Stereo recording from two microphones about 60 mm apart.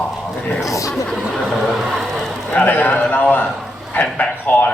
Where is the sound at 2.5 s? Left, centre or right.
Left.